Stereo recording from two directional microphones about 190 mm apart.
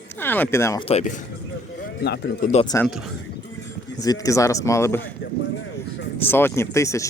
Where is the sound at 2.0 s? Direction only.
60° left (ahead or behind).